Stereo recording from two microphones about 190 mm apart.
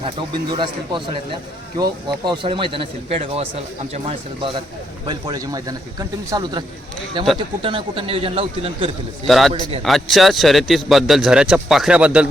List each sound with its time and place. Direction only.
0.0 s speech: 25° right (ahead or behind)
5.0 s speech: 20° right (ahead or behind)
9.2 s a man's voice: centre (ahead or behind)
9.5 s speech: 25° right (ahead or behind)
9.8 s a man's voice: centre (ahead or behind)